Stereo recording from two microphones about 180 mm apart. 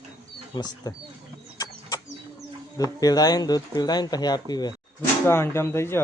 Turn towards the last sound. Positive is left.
turn(degrees=15)  # may be behind; listen again after turning